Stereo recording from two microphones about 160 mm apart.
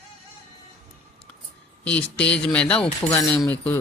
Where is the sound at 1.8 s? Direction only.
10° left (ahead or behind).